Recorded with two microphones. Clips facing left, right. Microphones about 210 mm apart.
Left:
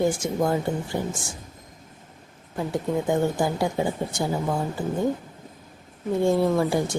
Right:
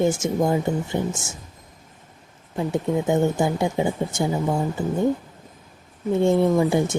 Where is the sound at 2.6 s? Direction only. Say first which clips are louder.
Right 3 dB; 20° right (ahead or behind).